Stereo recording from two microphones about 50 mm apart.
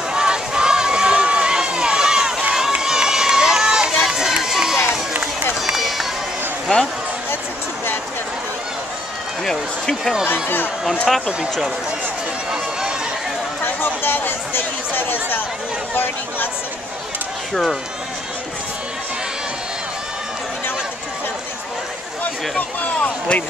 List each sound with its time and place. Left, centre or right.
0.1 s run: centre
6.7 s speech: centre
9.4 s a sound: centre
10.2 s speech: left
10.8 s speech: centre
13.7 s chatter: left
22.2 s speech: left